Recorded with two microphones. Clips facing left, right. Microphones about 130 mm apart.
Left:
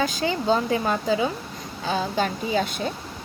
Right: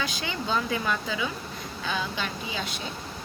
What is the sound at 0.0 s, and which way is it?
Speech, 40° left (ahead or behind).